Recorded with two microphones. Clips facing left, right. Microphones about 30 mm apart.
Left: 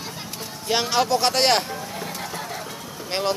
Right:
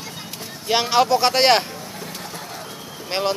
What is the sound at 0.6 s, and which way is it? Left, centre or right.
Speech, centre.